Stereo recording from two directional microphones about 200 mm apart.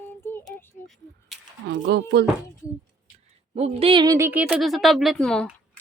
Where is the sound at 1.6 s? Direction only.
60° right (ahead or behind).